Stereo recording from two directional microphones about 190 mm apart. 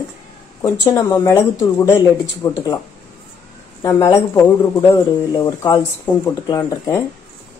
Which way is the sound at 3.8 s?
15° left (ahead or behind).